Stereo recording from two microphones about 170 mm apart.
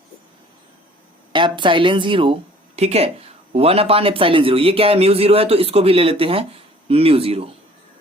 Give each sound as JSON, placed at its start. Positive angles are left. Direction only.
{"t": 1.3, "sound": "speech", "side_deg": -30}